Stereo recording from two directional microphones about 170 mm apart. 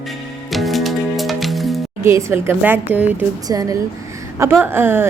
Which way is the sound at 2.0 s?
15° right (ahead or behind).